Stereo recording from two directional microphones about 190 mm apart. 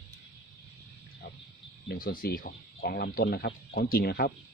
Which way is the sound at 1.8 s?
50° left (ahead or behind).